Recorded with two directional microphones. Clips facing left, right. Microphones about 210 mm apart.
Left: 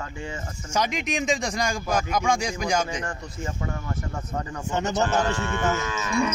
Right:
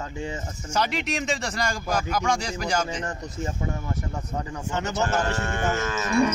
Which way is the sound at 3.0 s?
20° right (ahead or behind).